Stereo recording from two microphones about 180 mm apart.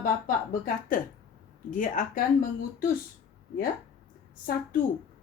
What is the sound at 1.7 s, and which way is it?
A woman's voice, 45° left (ahead or behind).